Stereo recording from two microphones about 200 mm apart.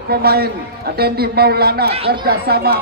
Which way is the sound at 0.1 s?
50° right (ahead or behind).